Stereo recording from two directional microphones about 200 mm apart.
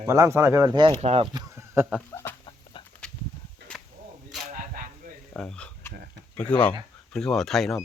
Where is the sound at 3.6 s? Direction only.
60° right (ahead or behind).